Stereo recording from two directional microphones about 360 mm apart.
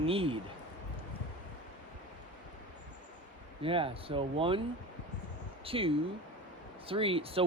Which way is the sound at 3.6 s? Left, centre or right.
Centre.